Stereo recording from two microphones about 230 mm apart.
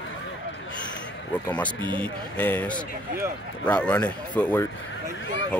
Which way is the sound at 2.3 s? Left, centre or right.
Centre.